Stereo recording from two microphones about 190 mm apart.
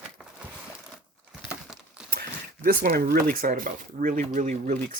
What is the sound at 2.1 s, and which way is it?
Speech, 50° right (ahead or behind).